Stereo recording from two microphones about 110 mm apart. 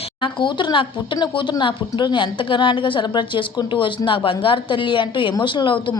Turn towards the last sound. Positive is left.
turn(degrees=50)  # may be behind; listen again after turning